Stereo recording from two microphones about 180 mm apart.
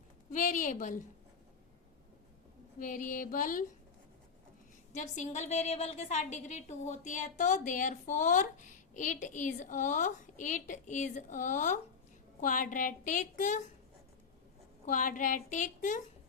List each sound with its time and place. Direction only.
0.3 s a woman's voice: 45° left (ahead or behind)
2.7 s a woman's voice: 50° left (ahead or behind)
4.9 s a woman's voice: 40° left (ahead or behind)
14.8 s a woman's voice: 45° left (ahead or behind)